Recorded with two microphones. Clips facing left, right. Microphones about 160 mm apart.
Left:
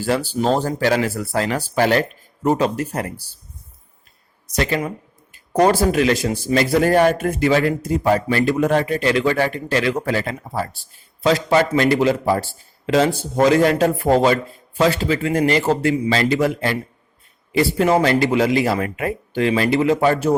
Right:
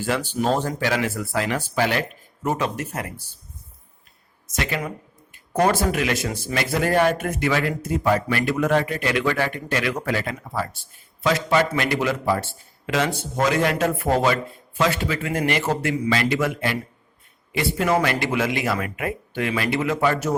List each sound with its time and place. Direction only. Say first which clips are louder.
0.0 s speech: left 4 dB; 35° left (ahead or behind)
4.5 s speech: left 6 dB; 35° left (ahead or behind)